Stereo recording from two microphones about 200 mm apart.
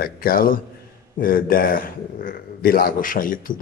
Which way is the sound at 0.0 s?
45° left (ahead or behind).